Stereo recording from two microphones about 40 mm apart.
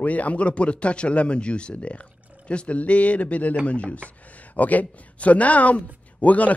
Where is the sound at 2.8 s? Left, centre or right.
Left.